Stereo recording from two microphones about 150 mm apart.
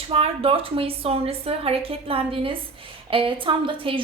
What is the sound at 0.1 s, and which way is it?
A woman's voice, 40° right (ahead or behind).